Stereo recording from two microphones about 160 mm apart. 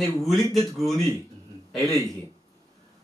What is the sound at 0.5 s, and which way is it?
Speech, centre (ahead or behind).